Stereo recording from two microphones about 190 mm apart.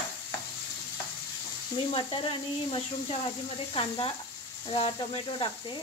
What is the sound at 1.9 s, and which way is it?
Sizzle, 25° left (ahead or behind).